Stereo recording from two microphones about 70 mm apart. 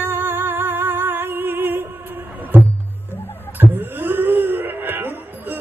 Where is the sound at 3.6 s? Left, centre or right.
Right.